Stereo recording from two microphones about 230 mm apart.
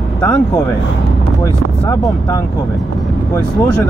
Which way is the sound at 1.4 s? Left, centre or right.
Centre.